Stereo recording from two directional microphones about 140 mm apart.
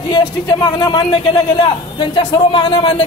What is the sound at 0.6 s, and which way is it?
A man's voice, 30° left (ahead or behind).